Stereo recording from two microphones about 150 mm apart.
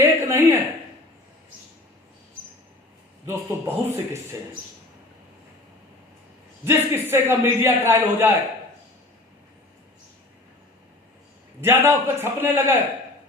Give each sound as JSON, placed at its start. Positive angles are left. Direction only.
{"t": 0.0, "sound": "a sound", "side_deg": -15}
{"t": 3.2, "sound": "a man's voice", "side_deg": -15}
{"t": 6.7, "sound": "a man's voice", "side_deg": -15}
{"t": 11.6, "sound": "a man's voice", "side_deg": -15}